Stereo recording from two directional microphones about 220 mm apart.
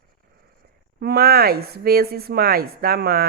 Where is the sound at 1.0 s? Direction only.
45° right (ahead or behind).